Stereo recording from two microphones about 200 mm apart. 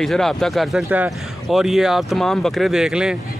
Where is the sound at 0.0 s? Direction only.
Centre (ahead or behind).